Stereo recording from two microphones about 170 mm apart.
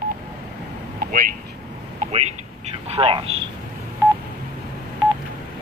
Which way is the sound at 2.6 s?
35° right (ahead or behind).